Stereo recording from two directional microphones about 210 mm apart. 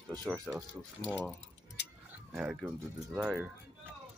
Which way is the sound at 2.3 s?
Centre (ahead or behind).